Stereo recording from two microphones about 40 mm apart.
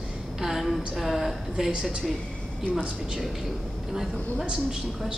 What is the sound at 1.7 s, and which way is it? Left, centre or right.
Speech, right.